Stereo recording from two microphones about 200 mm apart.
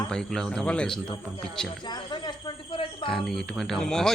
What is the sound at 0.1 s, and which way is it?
Speech, centre (ahead or behind).